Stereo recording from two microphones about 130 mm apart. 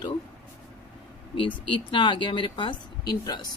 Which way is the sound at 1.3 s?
40° left (ahead or behind).